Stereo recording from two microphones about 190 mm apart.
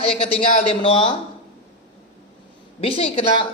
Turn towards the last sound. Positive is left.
turn(degrees=25)  # may be behind; listen again after turning